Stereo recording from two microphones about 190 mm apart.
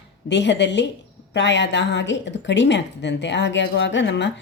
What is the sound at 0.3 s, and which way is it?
Speech, 70° left (ahead or behind).